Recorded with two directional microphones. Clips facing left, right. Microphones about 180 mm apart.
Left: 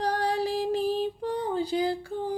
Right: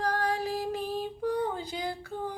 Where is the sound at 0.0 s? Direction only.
35° left (ahead or behind).